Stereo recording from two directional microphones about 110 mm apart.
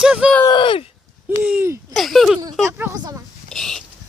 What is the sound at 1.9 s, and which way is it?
Speech, centre (ahead or behind).